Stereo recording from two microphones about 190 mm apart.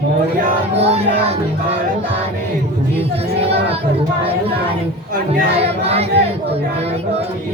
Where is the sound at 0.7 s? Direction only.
30° right (ahead or behind).